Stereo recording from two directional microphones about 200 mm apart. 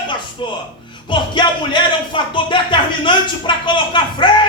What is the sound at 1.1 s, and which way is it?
Speech, 25° left (ahead or behind).